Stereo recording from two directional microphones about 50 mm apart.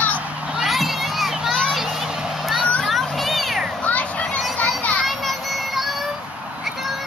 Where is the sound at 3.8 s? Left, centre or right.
Left.